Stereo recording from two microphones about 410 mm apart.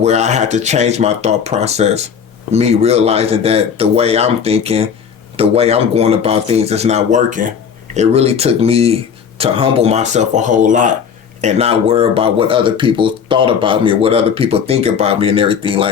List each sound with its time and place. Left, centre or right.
0.0 s speech: centre